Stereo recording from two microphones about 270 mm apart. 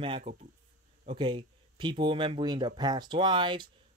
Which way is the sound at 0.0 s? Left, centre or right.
Right.